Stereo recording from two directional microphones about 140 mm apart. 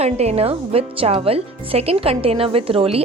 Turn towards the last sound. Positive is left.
turn(degrees=-45)  # may be behind; listen again after turning